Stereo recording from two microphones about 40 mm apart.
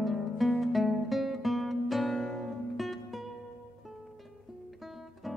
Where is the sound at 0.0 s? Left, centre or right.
Centre.